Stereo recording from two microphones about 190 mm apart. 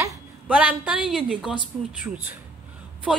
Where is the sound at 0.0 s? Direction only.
15° right (ahead or behind).